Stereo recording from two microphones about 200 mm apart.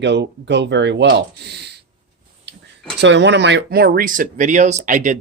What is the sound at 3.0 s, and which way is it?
Speech, 60° right (ahead or behind).